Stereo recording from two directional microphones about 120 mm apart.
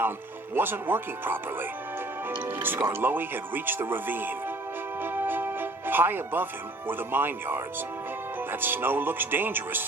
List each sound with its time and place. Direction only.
0.5 s speech: 15° right (ahead or behind)
2.5 s speech: 15° right (ahead or behind)